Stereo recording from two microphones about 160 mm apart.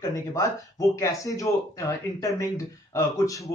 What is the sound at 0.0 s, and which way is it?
Speech, 20° left (ahead or behind).